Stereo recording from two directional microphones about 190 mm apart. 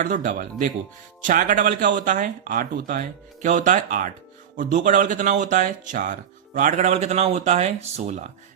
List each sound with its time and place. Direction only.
0.0 s speech: 40° right (ahead or behind)